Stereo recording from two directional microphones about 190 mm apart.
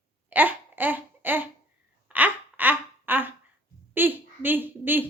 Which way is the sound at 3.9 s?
10° right (ahead or behind).